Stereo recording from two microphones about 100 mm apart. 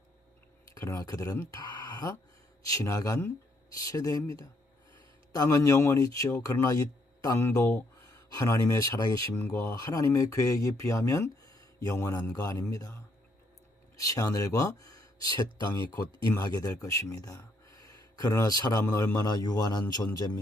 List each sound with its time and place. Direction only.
0.7 s speech: 35° left (ahead or behind)
1.5 s a sound: 45° left (ahead or behind)
2.6 s speech: 35° left (ahead or behind)
9.4 s speech: 25° left (ahead or behind)
9.7 s speech: 35° left (ahead or behind)
13.9 s speech: 35° left (ahead or behind)